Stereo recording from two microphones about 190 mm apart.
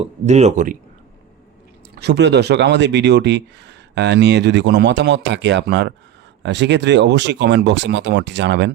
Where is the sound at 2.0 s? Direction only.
60° right (ahead or behind).